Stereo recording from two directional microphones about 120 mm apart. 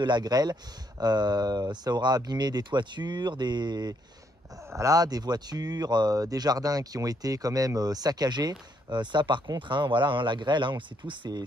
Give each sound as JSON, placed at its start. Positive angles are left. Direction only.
{"t": 0.0, "sound": "speech", "side_deg": -35}